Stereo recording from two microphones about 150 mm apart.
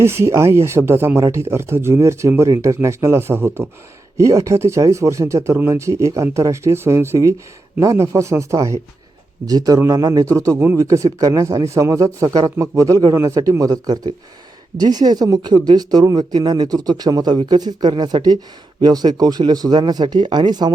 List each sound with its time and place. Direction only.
0.0 s speech: 15° right (ahead or behind)